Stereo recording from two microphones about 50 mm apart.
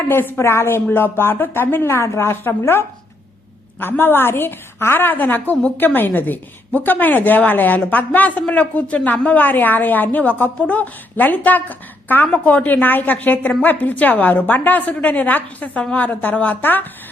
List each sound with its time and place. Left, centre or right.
0.1 s a woman's voice: left
0.9 s a woman's voice: left
1.9 s a woman's voice: left
3.8 s a woman's voice: left